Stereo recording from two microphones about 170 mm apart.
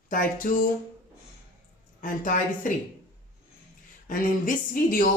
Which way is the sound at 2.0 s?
50° left (ahead or behind).